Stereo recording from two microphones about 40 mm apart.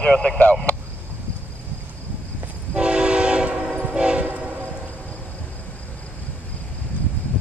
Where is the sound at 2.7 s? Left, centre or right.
Right.